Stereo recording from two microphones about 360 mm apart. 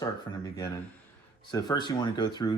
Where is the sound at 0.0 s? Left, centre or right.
Centre.